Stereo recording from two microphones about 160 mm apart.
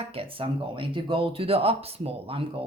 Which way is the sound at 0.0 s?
35° right (ahead or behind).